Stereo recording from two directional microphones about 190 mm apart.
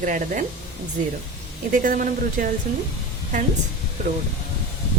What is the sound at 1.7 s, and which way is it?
Speech, 45° right (ahead or behind).